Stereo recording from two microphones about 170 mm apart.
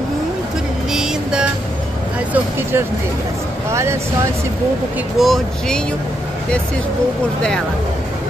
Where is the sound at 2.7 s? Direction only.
15° right (ahead or behind).